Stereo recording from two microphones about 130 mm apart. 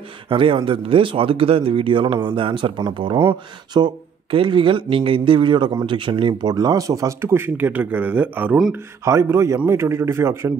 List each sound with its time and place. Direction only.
0.3 s speech: 40° right (ahead or behind); by 8.7 s 5° right (ahead or behind)
8.7 s speech: 20° right (ahead or behind)